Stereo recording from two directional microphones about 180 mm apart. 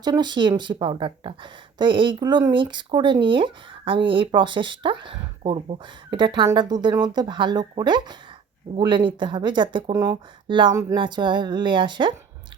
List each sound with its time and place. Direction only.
0.0 s speech: 25° right (ahead or behind)